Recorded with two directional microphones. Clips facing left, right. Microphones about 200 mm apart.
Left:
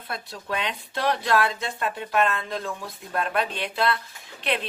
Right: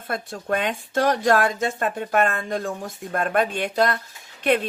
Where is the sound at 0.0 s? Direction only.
50° right (ahead or behind).